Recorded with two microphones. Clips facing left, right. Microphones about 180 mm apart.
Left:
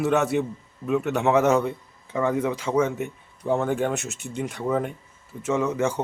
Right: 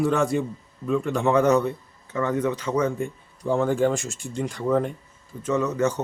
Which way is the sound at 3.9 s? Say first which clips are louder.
Right 1 dB; 65° left (ahead or behind).